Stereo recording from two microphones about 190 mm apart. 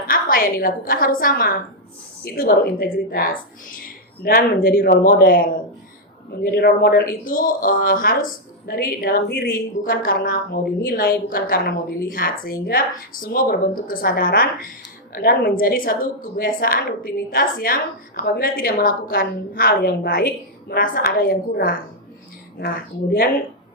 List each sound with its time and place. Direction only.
0.1 s a woman's voice: 50° left (ahead or behind)